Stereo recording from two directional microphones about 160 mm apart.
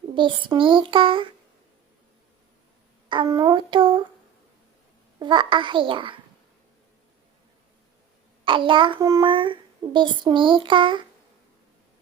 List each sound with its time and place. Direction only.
0.1 s a child's voice: 30° right (ahead or behind)
3.1 s a child's voice: 25° right (ahead or behind)
5.2 s a child's voice: 30° right (ahead or behind)
8.4 s a child's voice: 30° right (ahead or behind)